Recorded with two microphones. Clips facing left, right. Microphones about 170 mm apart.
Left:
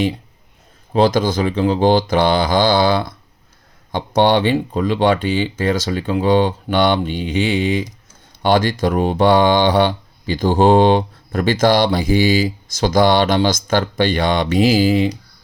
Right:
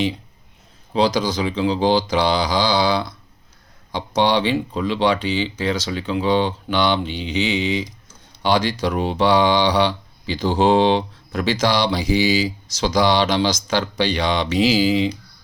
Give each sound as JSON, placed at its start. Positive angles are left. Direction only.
{"t": 0.9, "sound": "speech", "side_deg": 50}